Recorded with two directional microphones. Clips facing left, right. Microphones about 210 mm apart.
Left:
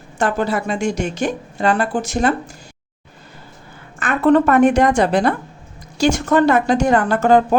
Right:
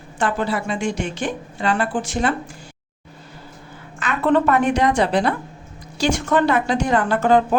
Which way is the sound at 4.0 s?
50° left (ahead or behind).